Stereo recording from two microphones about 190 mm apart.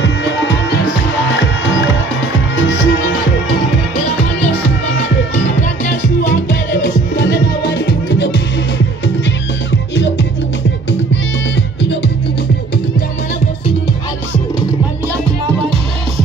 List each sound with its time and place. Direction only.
0.0 s music: 65° left (ahead or behind)
2.7 s music: 90° left
5.9 s music: 45° left (ahead or behind); by 8.4 s 65° left (ahead or behind)
9.7 s music: 70° left (ahead or behind)